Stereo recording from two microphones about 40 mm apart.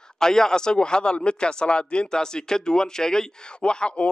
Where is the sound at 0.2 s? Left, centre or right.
Centre.